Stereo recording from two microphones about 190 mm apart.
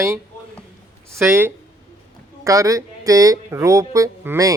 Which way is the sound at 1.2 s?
15° right (ahead or behind).